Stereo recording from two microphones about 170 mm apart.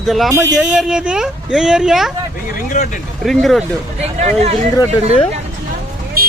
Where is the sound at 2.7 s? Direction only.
50° left (ahead or behind).